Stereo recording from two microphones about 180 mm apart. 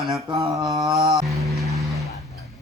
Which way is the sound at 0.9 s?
20° right (ahead or behind).